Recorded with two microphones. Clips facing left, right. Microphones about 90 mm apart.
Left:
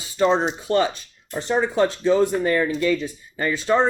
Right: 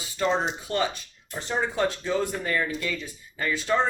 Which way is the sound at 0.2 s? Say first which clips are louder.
Left 6 dB; 40° left (ahead or behind).